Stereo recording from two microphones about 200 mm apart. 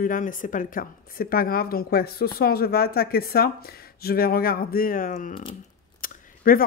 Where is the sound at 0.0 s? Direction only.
40° left (ahead or behind).